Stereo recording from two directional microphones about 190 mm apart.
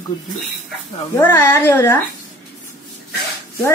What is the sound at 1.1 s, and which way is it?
Speech, 10° left (ahead or behind).